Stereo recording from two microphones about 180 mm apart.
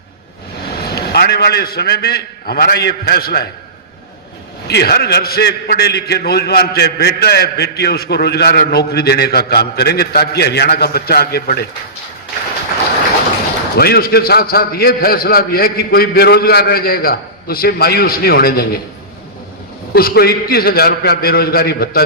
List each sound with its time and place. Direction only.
0.9 s a man's voice: 65° left (ahead or behind)
4.7 s a man's voice: 65° left (ahead or behind)
13.7 s a man's voice: 60° left (ahead or behind)
19.9 s a man's voice: 60° left (ahead or behind)